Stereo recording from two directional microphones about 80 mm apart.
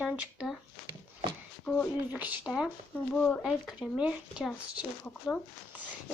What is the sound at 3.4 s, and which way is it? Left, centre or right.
Speech, centre.